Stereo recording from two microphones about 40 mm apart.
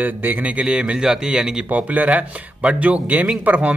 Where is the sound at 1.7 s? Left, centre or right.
Right.